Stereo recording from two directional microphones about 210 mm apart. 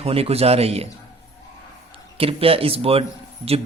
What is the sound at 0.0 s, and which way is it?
Speech, 30° right (ahead or behind).